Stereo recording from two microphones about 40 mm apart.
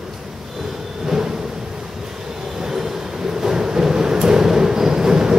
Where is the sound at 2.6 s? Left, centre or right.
Centre.